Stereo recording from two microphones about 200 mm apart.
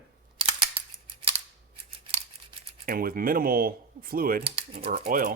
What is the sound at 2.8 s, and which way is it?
Speech, 45° right (ahead or behind).